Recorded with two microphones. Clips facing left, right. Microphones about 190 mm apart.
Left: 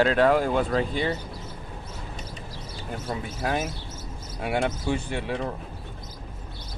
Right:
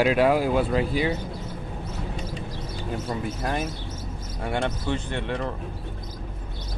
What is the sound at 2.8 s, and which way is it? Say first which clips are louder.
Speech: right 3 dB; centre (ahead or behind).